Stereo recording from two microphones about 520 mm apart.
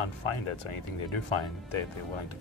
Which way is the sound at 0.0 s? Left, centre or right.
Left.